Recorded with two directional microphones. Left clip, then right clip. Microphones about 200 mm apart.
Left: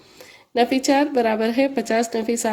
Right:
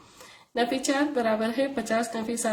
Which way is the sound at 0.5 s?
30° left (ahead or behind).